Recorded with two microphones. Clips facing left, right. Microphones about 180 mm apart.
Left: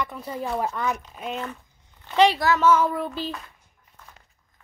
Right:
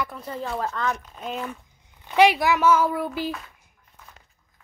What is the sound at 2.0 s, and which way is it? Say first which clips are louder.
Speech: right 1 dB; 10° right (ahead or behind).